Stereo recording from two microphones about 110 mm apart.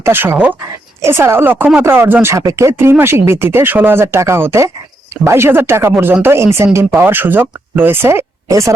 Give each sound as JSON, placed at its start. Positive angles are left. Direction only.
{"t": 0.0, "sound": "speech", "side_deg": -20}